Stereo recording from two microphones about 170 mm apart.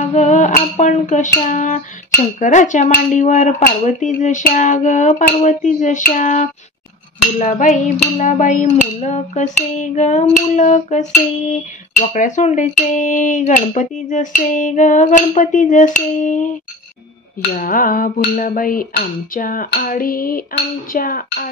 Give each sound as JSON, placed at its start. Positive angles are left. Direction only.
{"t": 0.0, "sound": "a sound", "side_deg": 45}
{"t": 2.4, "sound": "speech", "side_deg": 45}
{"t": 17.6, "sound": "dishes", "side_deg": 55}